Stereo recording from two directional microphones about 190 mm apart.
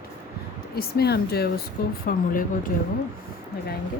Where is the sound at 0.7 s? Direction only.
55° left (ahead or behind).